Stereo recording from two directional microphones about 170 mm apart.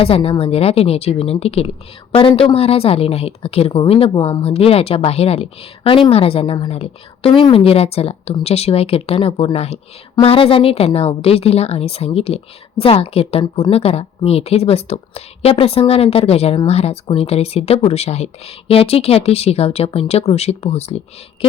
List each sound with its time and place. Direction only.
0.0 s speech: 35° left (ahead or behind)